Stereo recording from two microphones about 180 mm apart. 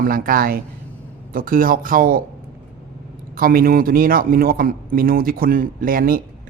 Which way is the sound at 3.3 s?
55° right (ahead or behind).